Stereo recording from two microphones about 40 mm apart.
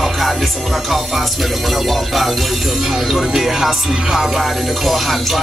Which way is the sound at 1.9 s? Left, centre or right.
Centre.